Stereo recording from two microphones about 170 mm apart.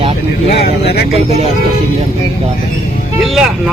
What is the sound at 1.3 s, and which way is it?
Speech, 40° right (ahead or behind).